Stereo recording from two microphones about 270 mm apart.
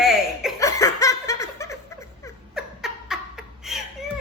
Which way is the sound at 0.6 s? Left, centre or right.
Centre.